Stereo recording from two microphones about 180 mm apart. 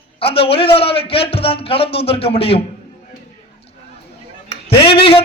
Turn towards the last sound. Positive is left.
turn(degrees=30)  # may be behind; listen again after turning